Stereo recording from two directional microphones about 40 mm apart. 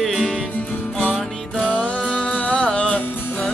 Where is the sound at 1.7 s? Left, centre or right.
Left.